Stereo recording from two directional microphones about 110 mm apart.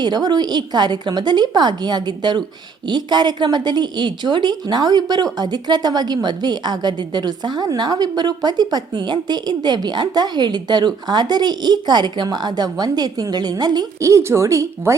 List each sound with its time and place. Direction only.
0.0 s a woman's voice: 40° right (ahead or behind)